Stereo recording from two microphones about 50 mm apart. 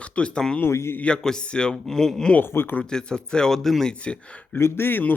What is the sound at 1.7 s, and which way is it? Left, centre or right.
Speech, centre.